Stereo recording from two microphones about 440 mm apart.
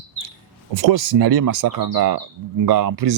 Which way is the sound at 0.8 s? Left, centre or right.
Right.